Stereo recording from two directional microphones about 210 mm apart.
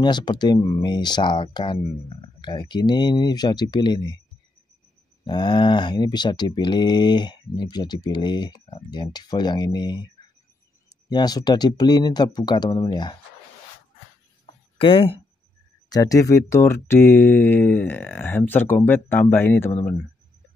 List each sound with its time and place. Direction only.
0.0 s speech: 20° left (ahead or behind)
5.2 s speech: 20° left (ahead or behind)
11.1 s speech: 20° left (ahead or behind)
14.4 s a sound: 25° left (ahead or behind)
15.9 s speech: 15° left (ahead or behind)